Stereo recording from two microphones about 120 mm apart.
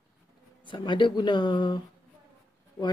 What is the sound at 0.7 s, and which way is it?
Speech, 40° left (ahead or behind).